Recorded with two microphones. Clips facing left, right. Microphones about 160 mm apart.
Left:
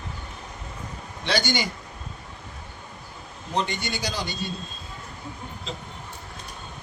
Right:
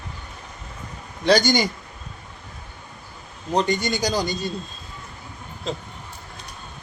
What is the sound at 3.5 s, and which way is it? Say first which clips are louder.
Speech: right 6 dB; 40° right (ahead or behind).